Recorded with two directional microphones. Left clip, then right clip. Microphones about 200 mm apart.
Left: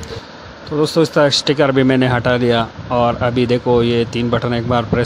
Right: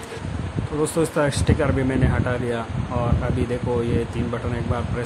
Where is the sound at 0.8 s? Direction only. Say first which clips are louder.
Left 8 dB; 30° left (ahead or behind).